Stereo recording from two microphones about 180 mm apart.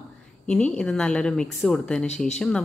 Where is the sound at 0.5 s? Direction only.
5° left (ahead or behind).